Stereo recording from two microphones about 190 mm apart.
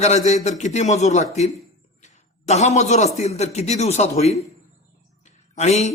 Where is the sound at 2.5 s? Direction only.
35° left (ahead or behind).